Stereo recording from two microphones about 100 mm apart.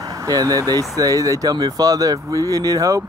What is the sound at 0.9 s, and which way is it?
Speech, 35° right (ahead or behind).